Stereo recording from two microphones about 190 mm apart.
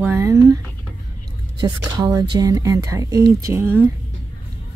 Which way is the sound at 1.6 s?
20° right (ahead or behind).